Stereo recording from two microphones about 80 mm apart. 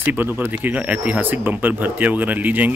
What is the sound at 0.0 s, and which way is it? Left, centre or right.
Speech, right.